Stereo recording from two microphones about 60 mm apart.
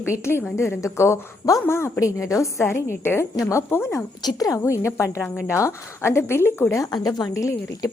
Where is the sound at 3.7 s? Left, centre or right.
Left.